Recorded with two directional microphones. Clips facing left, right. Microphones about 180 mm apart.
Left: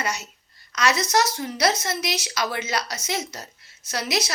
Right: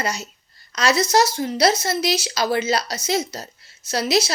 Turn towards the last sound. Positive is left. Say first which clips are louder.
# right 6 dB
turn(degrees=-30)  # may be behind; listen again after turning